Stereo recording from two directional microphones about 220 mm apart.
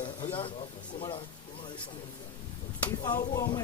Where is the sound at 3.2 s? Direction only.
20° left (ahead or behind).